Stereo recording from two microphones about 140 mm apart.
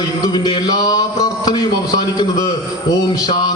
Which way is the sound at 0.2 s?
30° left (ahead or behind).